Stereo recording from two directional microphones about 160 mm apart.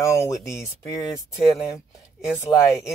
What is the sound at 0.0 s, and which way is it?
Speech, 20° left (ahead or behind).